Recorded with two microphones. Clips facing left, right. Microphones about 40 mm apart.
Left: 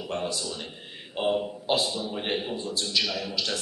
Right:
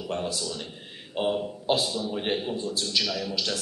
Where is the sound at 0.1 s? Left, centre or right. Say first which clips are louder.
Even; centre.